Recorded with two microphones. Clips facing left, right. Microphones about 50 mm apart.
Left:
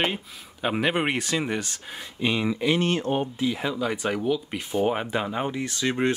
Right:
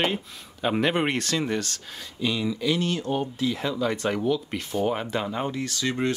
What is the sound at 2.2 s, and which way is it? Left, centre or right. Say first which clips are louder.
Speech: left 2 dB; left.